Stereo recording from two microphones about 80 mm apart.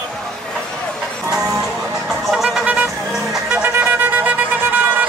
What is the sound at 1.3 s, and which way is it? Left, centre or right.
Vehicle, centre.